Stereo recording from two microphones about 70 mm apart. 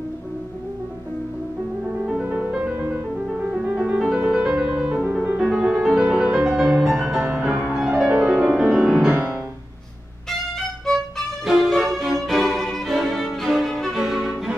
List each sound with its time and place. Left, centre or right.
2.4 s music: centre
9.1 s music: right
10.9 s music: centre